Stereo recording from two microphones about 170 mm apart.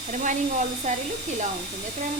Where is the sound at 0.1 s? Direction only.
45° right (ahead or behind).